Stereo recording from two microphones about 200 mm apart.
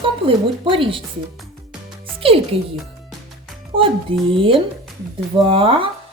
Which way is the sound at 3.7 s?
25° right (ahead or behind).